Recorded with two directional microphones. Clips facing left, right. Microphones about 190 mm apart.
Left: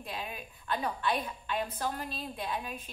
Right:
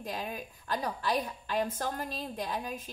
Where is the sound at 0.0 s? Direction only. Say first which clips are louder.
Right 3 dB; 45° right (ahead or behind).